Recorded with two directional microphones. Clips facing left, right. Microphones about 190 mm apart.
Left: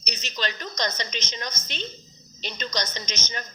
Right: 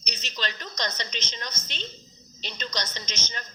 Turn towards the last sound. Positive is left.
turn(degrees=45)  # may be behind; listen again after turning